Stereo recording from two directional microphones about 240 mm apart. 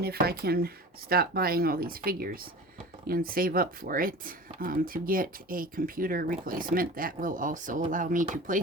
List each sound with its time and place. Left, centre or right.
0.0 s speech: right